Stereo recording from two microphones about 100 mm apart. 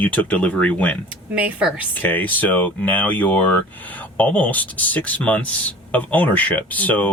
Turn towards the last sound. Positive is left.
turn(degrees=15)  # may be behind; listen again after turning